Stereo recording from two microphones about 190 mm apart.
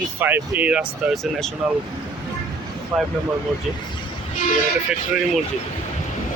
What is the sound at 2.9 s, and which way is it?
Speech, centre (ahead or behind).